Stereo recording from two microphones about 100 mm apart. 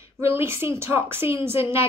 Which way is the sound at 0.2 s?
25° right (ahead or behind).